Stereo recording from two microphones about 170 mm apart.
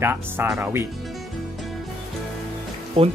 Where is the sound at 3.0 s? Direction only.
35° right (ahead or behind).